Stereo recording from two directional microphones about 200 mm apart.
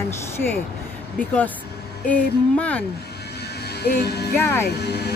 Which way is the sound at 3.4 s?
55° left (ahead or behind).